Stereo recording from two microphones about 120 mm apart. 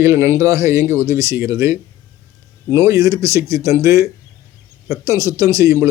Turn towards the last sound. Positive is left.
turn(degrees=-25)  # may be behind; listen again after turning